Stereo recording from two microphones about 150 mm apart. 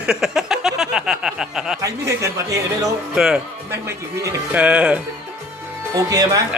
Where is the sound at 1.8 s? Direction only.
20° right (ahead or behind).